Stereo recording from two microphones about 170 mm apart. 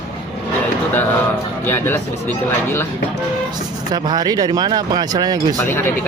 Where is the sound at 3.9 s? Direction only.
25° right (ahead or behind).